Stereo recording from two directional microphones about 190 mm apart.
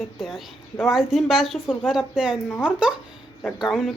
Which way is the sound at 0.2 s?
Centre (ahead or behind).